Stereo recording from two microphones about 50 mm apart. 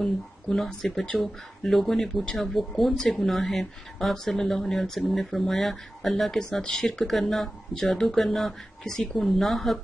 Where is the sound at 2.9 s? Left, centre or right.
Centre.